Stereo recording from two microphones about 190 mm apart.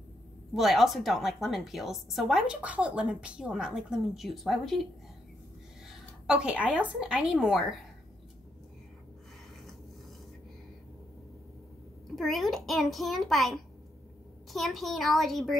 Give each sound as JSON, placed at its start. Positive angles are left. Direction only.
{"t": 0.6, "sound": "a woman's voice", "side_deg": 0}
{"t": 5.9, "sound": "a sound", "side_deg": -5}
{"t": 6.9, "sound": "a woman's voice", "side_deg": -5}
{"t": 12.2, "sound": "a woman's voice", "side_deg": 0}